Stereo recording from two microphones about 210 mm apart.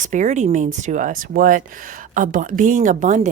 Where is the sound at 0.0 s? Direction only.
35° right (ahead or behind).